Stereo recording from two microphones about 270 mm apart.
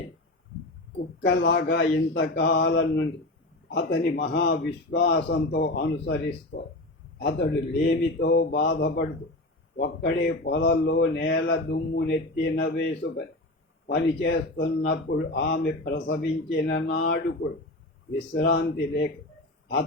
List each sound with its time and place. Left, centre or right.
1.3 s speech: left
18.3 s speech: left